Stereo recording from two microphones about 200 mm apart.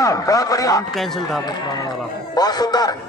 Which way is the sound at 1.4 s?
20° left (ahead or behind).